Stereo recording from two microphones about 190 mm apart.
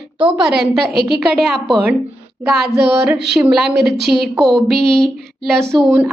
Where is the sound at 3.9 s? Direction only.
60° right (ahead or behind).